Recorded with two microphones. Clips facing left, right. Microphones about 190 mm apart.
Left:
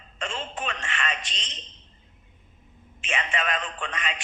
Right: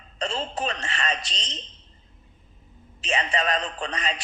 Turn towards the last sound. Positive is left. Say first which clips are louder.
# right 3 dB
turn(degrees=-35)  # may be behind; listen again after turning